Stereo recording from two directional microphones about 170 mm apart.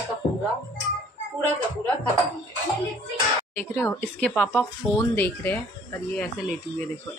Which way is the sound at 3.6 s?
10° left (ahead or behind).